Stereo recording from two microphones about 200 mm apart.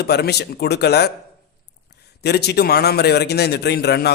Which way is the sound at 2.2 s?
55° left (ahead or behind).